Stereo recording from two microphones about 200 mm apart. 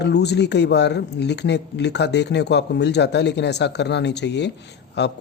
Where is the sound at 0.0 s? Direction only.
55° left (ahead or behind).